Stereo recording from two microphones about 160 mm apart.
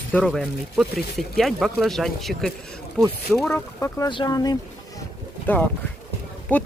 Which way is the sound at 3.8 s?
20° left (ahead or behind).